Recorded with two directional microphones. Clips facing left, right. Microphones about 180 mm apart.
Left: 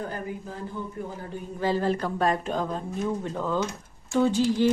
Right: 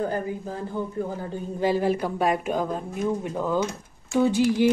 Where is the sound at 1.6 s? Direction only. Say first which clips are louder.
Right 2 dB; 15° right (ahead or behind).